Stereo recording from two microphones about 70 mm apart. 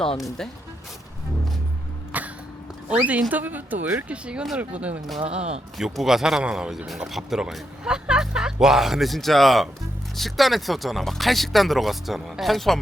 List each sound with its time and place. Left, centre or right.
2.1 s cough: right
2.9 s speech: centre
5.7 s speech: centre